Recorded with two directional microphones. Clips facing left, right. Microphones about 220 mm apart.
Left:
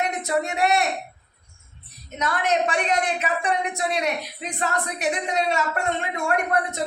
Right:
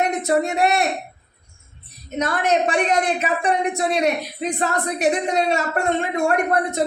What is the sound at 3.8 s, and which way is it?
A woman's voice, 30° right (ahead or behind).